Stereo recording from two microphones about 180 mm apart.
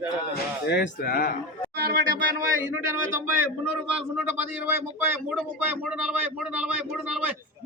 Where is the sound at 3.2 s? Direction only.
10° right (ahead or behind).